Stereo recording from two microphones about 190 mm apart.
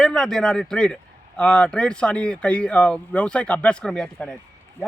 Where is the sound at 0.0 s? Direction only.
Centre (ahead or behind).